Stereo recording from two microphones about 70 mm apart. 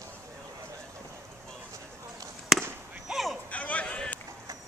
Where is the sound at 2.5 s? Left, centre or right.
Centre.